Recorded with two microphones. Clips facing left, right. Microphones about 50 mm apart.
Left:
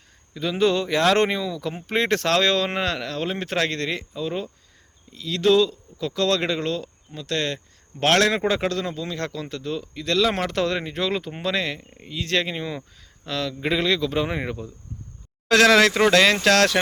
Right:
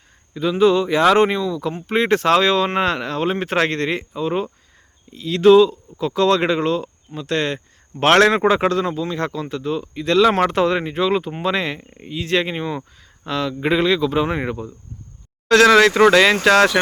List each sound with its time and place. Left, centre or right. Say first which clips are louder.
0.6 s speech: right 5 dB; centre
8.8 s speech: right 6 dB; centre
15.4 s speech: right 4 dB; centre